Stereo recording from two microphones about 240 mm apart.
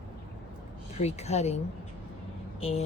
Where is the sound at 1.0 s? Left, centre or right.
Left.